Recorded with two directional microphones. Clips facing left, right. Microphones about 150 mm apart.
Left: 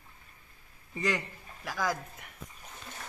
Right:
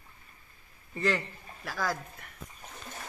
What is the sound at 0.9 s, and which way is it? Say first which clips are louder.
A man's voice: right 2 dB; 15° left (ahead or behind).